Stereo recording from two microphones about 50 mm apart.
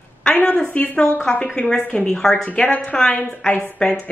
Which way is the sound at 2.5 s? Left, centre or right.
Left.